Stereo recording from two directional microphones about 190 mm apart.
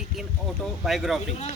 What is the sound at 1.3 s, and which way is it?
Speech, 35° left (ahead or behind).